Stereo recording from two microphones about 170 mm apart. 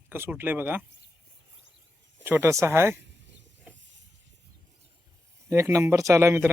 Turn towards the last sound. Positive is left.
turn(degrees=-15)  # may be behind; listen again after turning